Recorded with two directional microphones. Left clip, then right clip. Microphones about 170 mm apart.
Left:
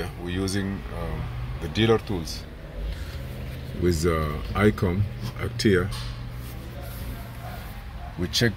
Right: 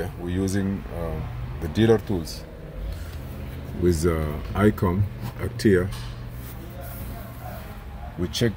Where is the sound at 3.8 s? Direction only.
25° right (ahead or behind).